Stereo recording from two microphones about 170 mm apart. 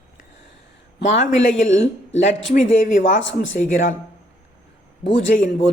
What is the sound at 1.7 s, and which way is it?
Speech, 90° left.